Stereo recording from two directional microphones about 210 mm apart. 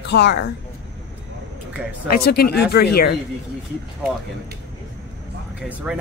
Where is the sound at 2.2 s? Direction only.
50° left (ahead or behind).